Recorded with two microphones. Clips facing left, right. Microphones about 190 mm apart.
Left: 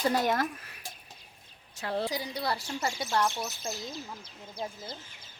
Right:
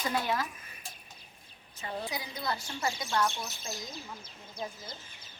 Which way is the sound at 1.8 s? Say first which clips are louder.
Left 6 dB; 75° left (ahead or behind).